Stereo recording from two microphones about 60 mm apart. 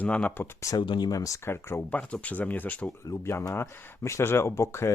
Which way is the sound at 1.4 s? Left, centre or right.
Left.